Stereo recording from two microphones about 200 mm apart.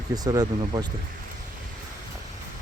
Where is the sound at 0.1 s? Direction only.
20° right (ahead or behind).